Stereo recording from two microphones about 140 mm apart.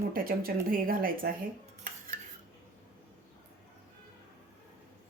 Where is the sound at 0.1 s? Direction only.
90° right.